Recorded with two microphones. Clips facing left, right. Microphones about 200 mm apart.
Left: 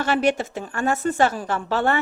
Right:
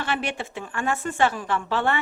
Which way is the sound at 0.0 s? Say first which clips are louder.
Left 8 dB; 40° left (ahead or behind).